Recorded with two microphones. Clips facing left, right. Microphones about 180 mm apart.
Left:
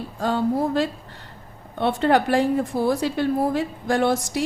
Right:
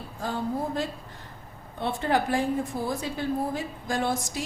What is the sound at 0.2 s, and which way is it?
A woman's voice, 75° left (ahead or behind).